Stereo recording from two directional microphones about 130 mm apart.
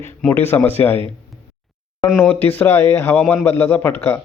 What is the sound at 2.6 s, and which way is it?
Speech, 20° left (ahead or behind).